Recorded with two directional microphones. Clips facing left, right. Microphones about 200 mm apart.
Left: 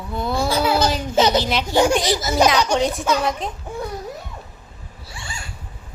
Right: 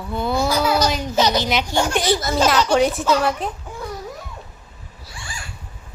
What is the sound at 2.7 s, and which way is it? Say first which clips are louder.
Speech: right 3 dB; 5° right (ahead or behind).